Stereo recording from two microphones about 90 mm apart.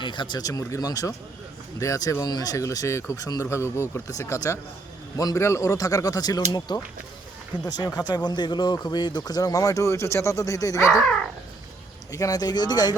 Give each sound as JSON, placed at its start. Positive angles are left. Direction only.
{"t": 0.0, "sound": "a man's voice", "side_deg": 60}
{"t": 12.1, "sound": "a man's voice", "side_deg": 45}